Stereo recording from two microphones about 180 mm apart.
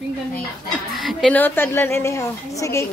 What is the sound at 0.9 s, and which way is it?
A woman's voice, centre (ahead or behind).